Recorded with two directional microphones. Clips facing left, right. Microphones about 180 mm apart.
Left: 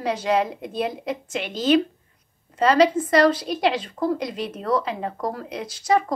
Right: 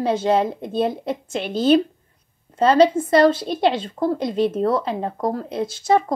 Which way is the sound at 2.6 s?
30° right (ahead or behind).